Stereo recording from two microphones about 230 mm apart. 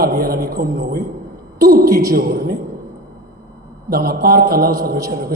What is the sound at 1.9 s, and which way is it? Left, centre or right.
Speech, centre.